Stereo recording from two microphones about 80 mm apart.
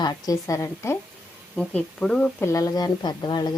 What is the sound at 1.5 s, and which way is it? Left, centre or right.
Speech, centre.